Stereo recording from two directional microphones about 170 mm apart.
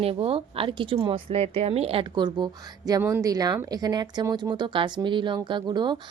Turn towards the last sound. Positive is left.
turn(degrees=-25)  # may be behind; listen again after turning